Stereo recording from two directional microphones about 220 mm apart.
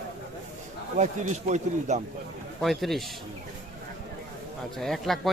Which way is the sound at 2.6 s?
Centre (ahead or behind).